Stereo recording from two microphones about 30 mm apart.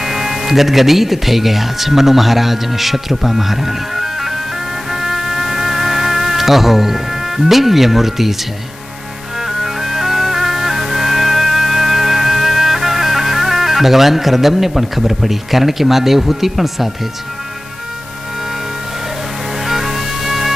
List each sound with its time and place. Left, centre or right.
0.0 s speech: centre
4.9 s music: centre
9.4 s music: centre
19.6 s music: centre